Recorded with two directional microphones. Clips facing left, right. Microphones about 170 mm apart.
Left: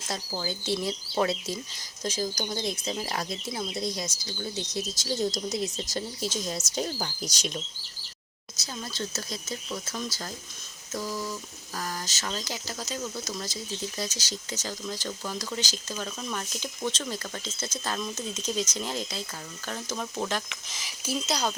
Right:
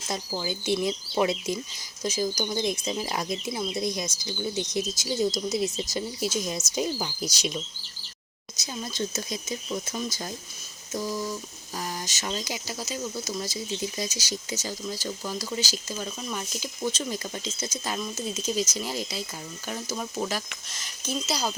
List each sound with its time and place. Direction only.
0.4 s speech: 15° right (ahead or behind)
8.5 s speech: 15° right (ahead or behind); by 21.3 s 5° left (ahead or behind)